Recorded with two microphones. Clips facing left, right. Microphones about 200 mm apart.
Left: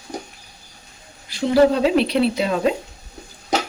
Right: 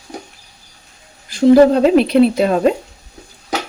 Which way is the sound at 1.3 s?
50° right (ahead or behind).